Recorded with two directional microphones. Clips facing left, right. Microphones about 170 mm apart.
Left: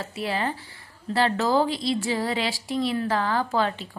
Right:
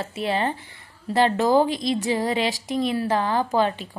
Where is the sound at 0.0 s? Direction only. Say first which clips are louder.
Right 3 dB; 25° right (ahead or behind).